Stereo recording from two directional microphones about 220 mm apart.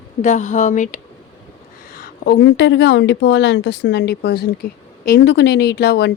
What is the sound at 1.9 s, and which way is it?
A woman's voice, 45° left (ahead or behind).